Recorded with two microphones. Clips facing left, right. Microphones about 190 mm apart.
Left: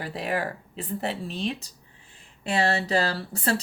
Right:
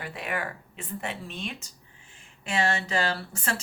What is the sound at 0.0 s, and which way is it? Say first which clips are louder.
Speech: left 5 dB; 35° left (ahead or behind).